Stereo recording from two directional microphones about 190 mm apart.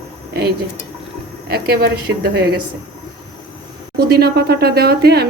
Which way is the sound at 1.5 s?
55° right (ahead or behind).